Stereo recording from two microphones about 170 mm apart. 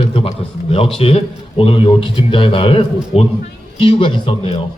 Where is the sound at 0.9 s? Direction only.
35° left (ahead or behind).